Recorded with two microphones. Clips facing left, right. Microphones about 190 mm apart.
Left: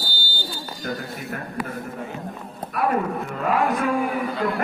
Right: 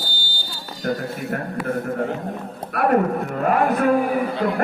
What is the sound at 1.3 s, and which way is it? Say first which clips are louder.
Speech: right 6 dB; 55° right (ahead or behind).